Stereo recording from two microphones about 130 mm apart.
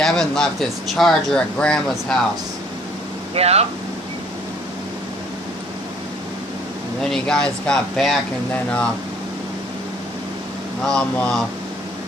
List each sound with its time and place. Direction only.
0.0 s speech: 5° left (ahead or behind)
3.3 s speech: 55° right (ahead or behind)
7.0 s speech: 5° left (ahead or behind)
10.8 s speech: 5° left (ahead or behind)